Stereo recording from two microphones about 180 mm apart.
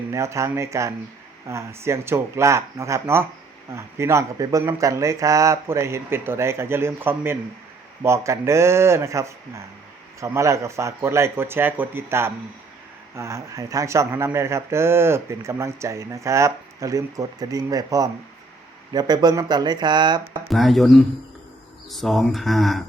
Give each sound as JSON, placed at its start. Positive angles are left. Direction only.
{"t": 0.1, "sound": "speech", "side_deg": -15}
{"t": 20.5, "sound": "speech", "side_deg": 0}